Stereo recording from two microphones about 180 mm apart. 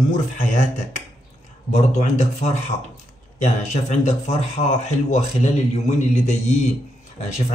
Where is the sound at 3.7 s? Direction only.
40° left (ahead or behind).